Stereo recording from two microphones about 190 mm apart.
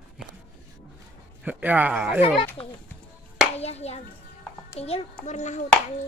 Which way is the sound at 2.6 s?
30° left (ahead or behind).